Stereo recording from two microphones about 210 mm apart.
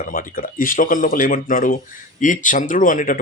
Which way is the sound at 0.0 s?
40° left (ahead or behind).